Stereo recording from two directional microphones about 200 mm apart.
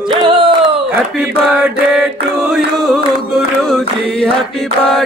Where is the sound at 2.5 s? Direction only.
Centre (ahead or behind).